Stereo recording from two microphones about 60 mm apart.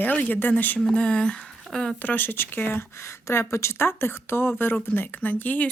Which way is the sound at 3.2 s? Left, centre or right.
Left.